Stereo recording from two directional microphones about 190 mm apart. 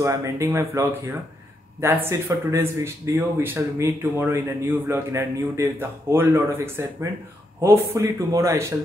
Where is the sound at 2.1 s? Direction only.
15° right (ahead or behind).